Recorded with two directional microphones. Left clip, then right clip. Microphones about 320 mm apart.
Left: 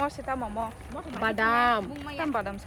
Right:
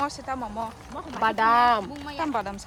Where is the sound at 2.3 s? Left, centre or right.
Centre.